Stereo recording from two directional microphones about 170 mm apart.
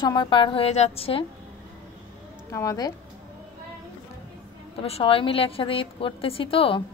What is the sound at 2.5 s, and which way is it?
Speech, 20° left (ahead or behind).